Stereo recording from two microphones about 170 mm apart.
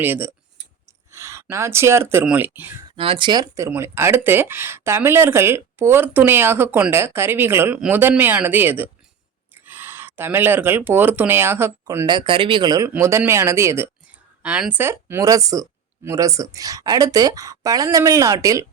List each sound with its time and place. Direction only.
0.0 s speech: 10° right (ahead or behind)
2.9 s speech: 30° right (ahead or behind); by 12.0 s 15° right (ahead or behind)
12.0 s speech: 30° right (ahead or behind)